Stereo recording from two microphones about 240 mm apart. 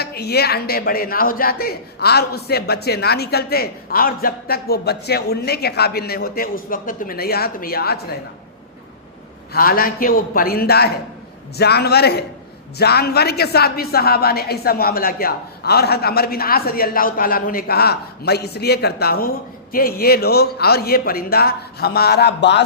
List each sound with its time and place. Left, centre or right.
0.0 s speech: left
9.5 s a man's voice: left